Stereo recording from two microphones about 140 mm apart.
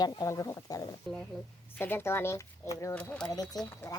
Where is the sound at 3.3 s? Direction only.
25° left (ahead or behind).